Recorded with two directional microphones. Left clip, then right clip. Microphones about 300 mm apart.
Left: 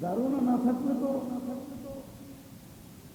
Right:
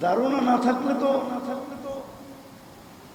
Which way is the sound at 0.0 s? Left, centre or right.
Centre.